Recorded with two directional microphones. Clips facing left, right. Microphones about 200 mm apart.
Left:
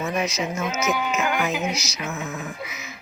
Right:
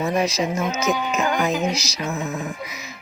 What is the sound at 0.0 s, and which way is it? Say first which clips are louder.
Speech: right 4 dB; 35° right (ahead or behind).